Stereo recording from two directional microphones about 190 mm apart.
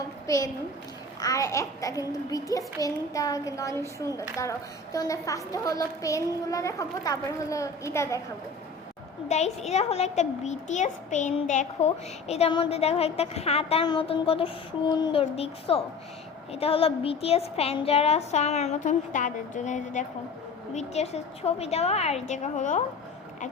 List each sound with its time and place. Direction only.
0.3 s a child's voice: 20° left (ahead or behind)
9.3 s a woman's voice: 35° left (ahead or behind)
12.3 s a woman's voice: 30° left (ahead or behind)